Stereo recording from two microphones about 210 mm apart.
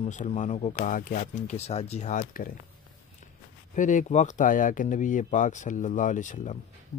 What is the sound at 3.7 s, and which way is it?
Speech, 35° left (ahead or behind).